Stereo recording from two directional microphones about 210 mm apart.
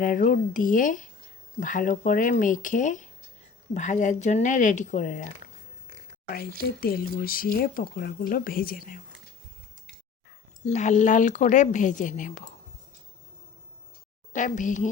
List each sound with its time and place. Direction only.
0.0 s a woman's voice: 40° left (ahead or behind)
6.2 s speech: 45° left (ahead or behind)
10.7 s a woman's voice: 35° left (ahead or behind)
14.3 s a woman's voice: 35° left (ahead or behind)